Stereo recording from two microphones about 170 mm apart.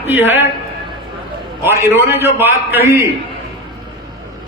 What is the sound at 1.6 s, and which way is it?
A man's voice, 15° right (ahead or behind).